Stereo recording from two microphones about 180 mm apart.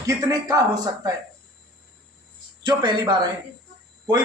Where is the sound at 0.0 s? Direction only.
20° right (ahead or behind).